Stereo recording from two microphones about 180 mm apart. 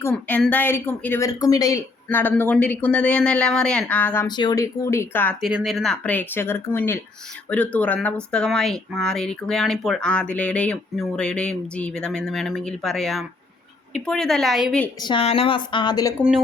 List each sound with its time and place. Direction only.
0.0 s speech: 10° left (ahead or behind)
4.3 s speech: 25° left (ahead or behind)
5.4 s speech: 5° right (ahead or behind)
15.0 s a woman's voice: 30° left (ahead or behind)